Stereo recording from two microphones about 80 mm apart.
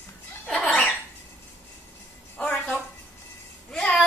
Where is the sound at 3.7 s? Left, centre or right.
Centre.